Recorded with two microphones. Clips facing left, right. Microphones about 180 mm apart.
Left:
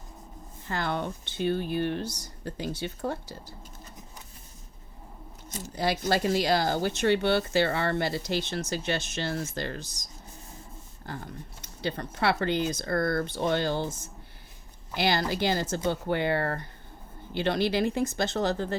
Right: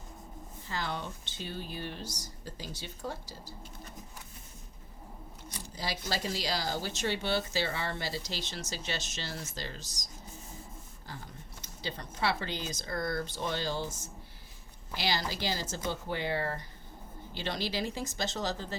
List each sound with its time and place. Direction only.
0.7 s speech: 60° left (ahead or behind)
5.6 s speech: 60° left (ahead or behind)